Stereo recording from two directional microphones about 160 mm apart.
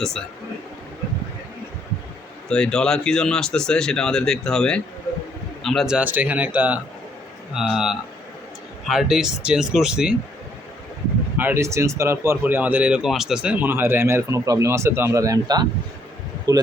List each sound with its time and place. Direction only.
2.5 s speech: 5° left (ahead or behind)
11.3 s speech: 15° right (ahead or behind)